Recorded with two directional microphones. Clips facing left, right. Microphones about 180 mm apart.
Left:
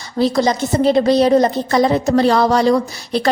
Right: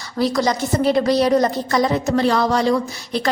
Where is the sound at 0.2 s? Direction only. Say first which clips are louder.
Left 3 dB; 25° left (ahead or behind).